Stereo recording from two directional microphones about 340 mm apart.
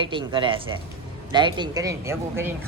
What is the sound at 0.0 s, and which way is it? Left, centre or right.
A woman's voice, centre.